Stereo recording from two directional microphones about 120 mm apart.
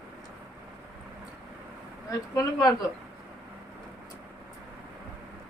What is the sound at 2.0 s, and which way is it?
Speech, 30° left (ahead or behind).